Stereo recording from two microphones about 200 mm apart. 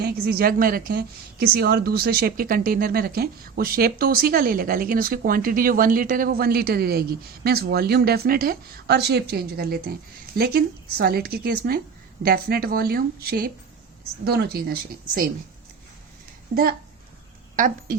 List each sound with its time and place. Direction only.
0.0 s a woman's voice: 50° right (ahead or behind)
16.5 s speech: 40° right (ahead or behind)